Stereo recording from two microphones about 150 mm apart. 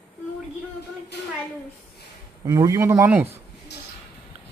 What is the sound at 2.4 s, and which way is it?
Speech, 25° right (ahead or behind).